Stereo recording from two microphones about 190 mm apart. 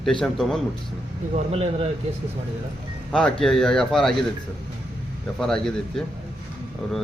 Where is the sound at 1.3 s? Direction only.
35° right (ahead or behind).